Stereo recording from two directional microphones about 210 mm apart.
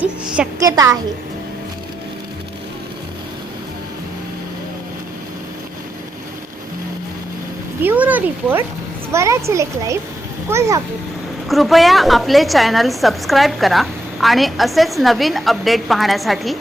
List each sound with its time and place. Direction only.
0.0 s a woman's voice: 10° right (ahead or behind)
7.8 s a child's voice: 10° right (ahead or behind)
11.4 s a woman's voice: centre (ahead or behind)